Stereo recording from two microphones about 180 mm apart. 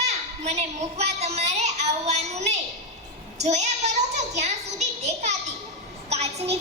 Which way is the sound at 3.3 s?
40° right (ahead or behind).